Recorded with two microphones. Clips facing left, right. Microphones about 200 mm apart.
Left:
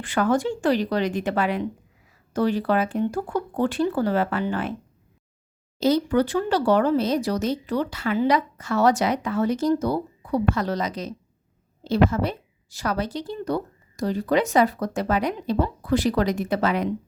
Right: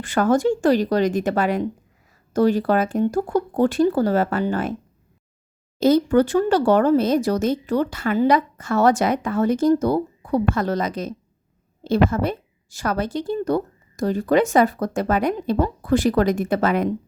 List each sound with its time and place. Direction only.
0.0 s speech: 45° right (ahead or behind)
5.8 s speech: 50° right (ahead or behind)